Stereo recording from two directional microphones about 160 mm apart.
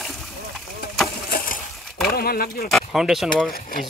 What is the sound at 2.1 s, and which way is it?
Speech, 70° left (ahead or behind).